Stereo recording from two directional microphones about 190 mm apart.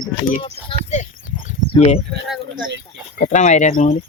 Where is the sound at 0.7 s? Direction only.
35° left (ahead or behind).